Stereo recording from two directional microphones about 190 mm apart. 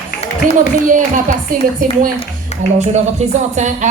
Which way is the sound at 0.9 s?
45° right (ahead or behind).